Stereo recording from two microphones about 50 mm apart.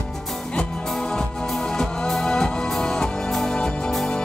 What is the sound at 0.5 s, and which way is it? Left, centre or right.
Music, left.